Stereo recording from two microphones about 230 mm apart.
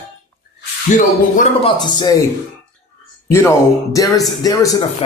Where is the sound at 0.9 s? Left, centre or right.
Left.